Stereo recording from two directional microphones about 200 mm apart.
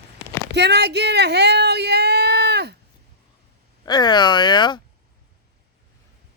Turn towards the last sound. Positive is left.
turn(degrees=25)  # may be behind; listen again after turning